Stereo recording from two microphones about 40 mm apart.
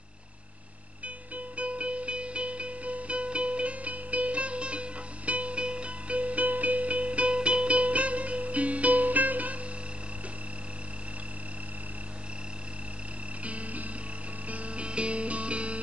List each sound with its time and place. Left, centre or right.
1.0 s music: right
13.4 s music: right